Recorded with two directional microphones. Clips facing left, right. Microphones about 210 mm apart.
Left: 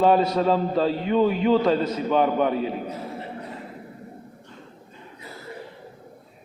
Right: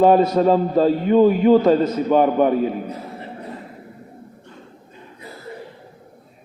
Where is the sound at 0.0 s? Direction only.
45° right (ahead or behind).